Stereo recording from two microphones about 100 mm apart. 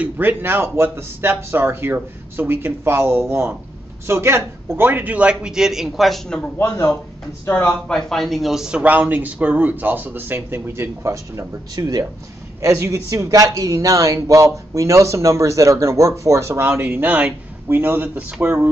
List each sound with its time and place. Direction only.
0.0 s speech: 20° right (ahead or behind); by 6.5 s 5° left (ahead or behind)
7.4 s speech: 20° left (ahead or behind)
7.9 s a man's voice: centre (ahead or behind); by 18.7 s 20° right (ahead or behind)